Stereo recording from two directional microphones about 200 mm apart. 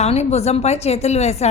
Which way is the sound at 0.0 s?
35° left (ahead or behind).